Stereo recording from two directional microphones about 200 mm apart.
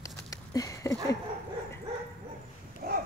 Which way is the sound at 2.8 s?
55° right (ahead or behind).